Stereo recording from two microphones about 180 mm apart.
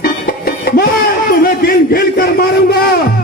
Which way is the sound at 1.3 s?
55° left (ahead or behind).